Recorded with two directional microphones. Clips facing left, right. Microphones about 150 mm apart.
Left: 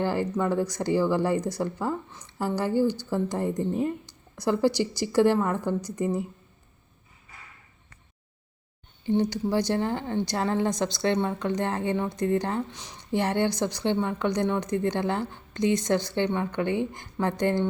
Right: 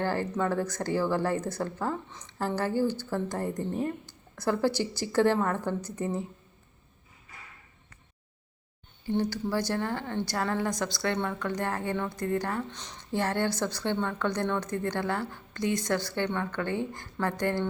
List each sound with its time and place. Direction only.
0.0 s speech: 15° left (ahead or behind)
9.0 s a woman's voice: 20° left (ahead or behind)
12.7 s speech: 10° left (ahead or behind)